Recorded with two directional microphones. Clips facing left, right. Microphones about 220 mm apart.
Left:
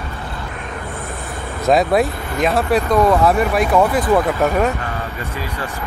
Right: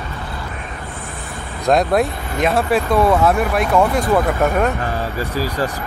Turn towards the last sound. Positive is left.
turn(degrees=-40)  # may be behind; listen again after turning